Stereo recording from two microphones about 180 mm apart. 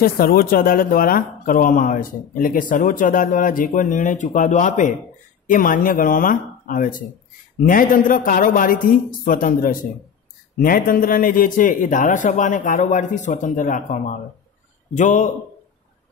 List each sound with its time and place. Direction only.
0.0 s speech: 55° left (ahead or behind)